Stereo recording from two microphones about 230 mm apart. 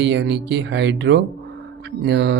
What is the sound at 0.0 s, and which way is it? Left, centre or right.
Speech, right.